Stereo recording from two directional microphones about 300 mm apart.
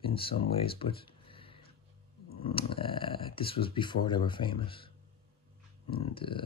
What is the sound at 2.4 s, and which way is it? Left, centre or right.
Speech, centre.